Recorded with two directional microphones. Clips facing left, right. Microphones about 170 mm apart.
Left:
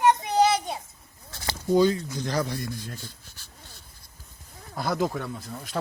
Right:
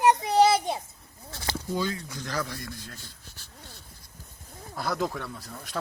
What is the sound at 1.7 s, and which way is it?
Speech, 20° left (ahead or behind).